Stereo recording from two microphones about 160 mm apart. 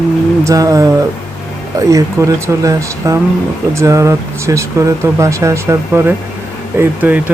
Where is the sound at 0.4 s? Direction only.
20° right (ahead or behind).